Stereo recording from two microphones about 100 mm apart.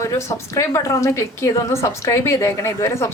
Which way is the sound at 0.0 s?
30° left (ahead or behind).